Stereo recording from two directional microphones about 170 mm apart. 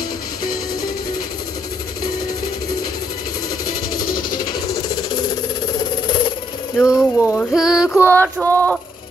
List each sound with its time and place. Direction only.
3.9 s music: 55° left (ahead or behind)
4.5 s coin: 20° left (ahead or behind)
6.0 s a sound: 25° left (ahead or behind)
6.9 s speech: 15° left (ahead or behind)
7.5 s music: 5° right (ahead or behind)
8.1 s a sound: 10° left (ahead or behind)